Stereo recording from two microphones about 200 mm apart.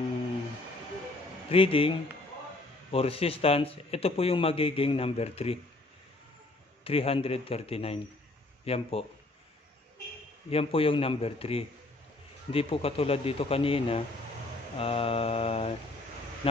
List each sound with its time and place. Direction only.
1.5 s a man's voice: 25° left (ahead or behind)
6.8 s a man's voice: 30° left (ahead or behind)
10.5 s a man's voice: 30° left (ahead or behind)